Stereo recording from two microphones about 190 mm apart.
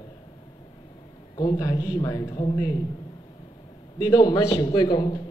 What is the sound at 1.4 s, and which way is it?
A man's voice, 20° left (ahead or behind).